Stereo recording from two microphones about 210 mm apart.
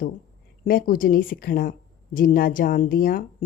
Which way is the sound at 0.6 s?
45° left (ahead or behind).